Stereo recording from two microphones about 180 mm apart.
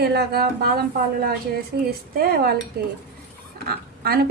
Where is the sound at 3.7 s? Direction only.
60° right (ahead or behind).